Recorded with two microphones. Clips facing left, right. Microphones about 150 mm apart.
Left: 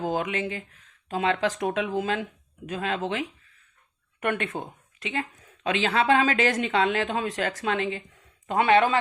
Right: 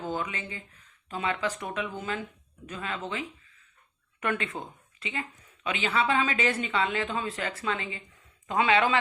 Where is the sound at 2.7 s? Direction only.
75° left (ahead or behind).